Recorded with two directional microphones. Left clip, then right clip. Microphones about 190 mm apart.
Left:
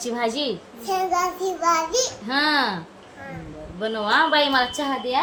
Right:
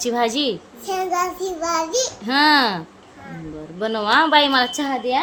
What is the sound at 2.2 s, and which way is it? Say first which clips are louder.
Speech: right 7 dB; 50° right (ahead or behind).